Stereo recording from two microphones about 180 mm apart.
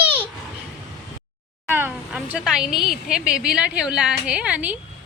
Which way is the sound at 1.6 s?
10° right (ahead or behind).